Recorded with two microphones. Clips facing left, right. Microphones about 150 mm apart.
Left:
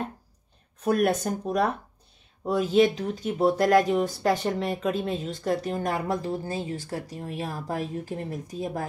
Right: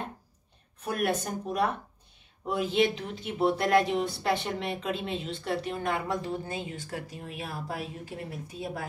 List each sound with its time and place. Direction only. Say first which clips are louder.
1.2 s speech: left 4 dB; 40° left (ahead or behind)